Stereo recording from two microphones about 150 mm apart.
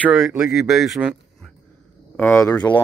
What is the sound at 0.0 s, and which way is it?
Speech, 5° right (ahead or behind).